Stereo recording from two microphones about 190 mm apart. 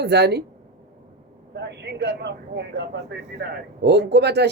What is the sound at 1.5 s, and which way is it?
Vehicle, 60° right (ahead or behind).